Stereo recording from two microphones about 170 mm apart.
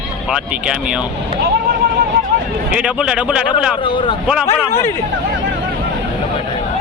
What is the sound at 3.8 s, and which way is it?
Speech, 30° left (ahead or behind).